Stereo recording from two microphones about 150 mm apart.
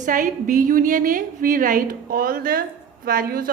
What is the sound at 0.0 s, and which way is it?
A woman's voice, 60° right (ahead or behind).